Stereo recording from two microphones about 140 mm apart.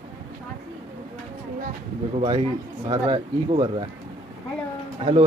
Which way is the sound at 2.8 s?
35° right (ahead or behind).